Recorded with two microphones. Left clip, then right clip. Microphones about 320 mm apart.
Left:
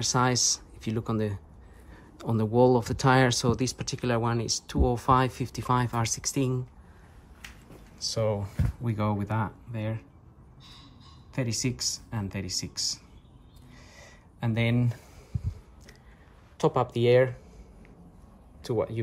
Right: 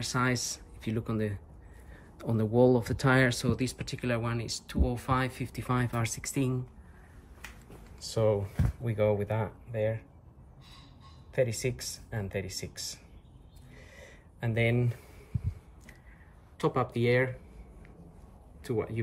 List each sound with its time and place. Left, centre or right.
0.0 s speech: centre
11.3 s speech: centre
13.7 s a sound: centre
16.5 s speech: centre
18.6 s speech: centre